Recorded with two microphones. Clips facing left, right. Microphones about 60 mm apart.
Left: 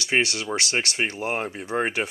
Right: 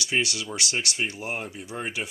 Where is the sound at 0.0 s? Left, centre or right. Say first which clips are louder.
Left 4 dB; left.